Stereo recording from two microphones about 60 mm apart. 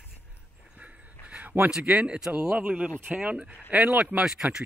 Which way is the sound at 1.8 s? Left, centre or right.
Centre.